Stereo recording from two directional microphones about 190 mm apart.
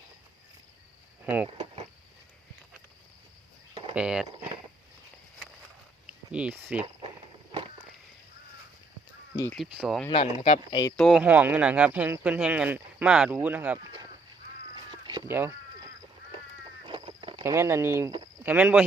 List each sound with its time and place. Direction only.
1.2 s speech: 10° right (ahead or behind)
3.9 s speech: 5° right (ahead or behind)
6.1 s speech: 5° right (ahead or behind)
9.7 s speech: 5° right (ahead or behind)
10.1 s speech: 30° left (ahead or behind)
10.9 s speech: centre (ahead or behind)
11.2 s speech: 10° right (ahead or behind)
14.8 s cat: 25° right (ahead or behind)
15.3 s speech: 10° right (ahead or behind)
16.8 s a sound: 20° right (ahead or behind)
17.4 s speech: 15° right (ahead or behind)